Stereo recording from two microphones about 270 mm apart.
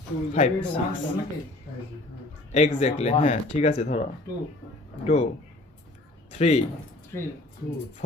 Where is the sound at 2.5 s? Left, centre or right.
Left.